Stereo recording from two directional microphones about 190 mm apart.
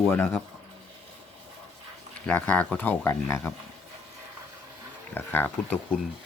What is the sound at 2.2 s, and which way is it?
Speech, 10° left (ahead or behind).